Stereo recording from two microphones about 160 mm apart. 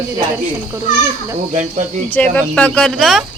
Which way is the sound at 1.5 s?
45° right (ahead or behind).